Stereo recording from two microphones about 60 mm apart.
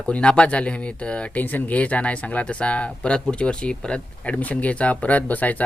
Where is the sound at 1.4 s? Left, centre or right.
Left.